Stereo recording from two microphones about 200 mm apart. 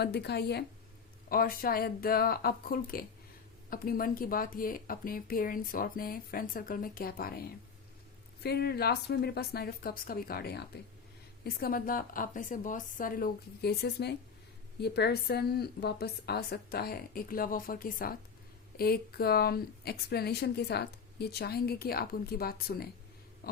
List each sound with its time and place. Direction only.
0.0 s a woman's voice: 55° left (ahead or behind)
8.4 s a woman's voice: 55° left (ahead or behind)